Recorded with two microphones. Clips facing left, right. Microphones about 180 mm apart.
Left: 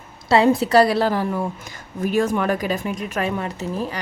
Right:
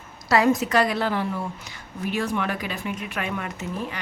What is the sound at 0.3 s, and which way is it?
A woman's voice, 30° left (ahead or behind).